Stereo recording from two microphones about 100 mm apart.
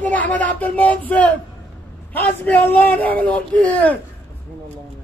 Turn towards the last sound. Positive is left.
turn(degrees=15)  # may be behind; listen again after turning